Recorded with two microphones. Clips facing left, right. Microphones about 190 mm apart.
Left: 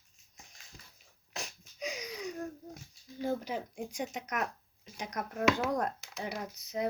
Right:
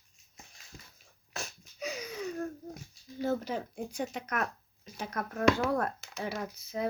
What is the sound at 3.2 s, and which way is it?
Speech, 15° left (ahead or behind).